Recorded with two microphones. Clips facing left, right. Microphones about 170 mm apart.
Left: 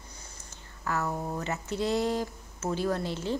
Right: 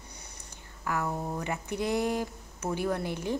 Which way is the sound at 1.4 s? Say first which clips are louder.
Left 2 dB; 15° right (ahead or behind).